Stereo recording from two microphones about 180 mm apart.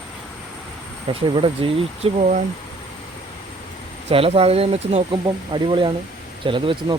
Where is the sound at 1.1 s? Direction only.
30° right (ahead or behind).